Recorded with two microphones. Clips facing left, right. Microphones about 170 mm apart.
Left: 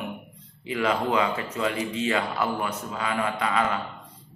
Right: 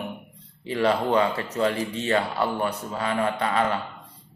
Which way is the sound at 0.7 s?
35° right (ahead or behind).